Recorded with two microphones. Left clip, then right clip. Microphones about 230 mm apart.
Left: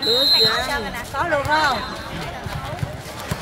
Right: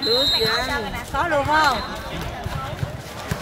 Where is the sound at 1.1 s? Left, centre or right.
Right.